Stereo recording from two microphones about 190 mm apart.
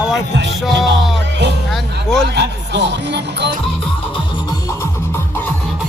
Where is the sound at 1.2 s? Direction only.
65° right (ahead or behind).